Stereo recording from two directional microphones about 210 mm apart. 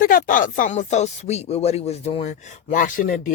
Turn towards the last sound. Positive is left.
turn(degrees=40)  # may be behind; listen again after turning